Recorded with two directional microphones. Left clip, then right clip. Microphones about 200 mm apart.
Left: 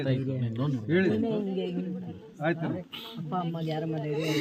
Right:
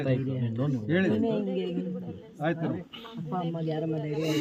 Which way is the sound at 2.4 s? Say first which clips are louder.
Even; 15° right (ahead or behind).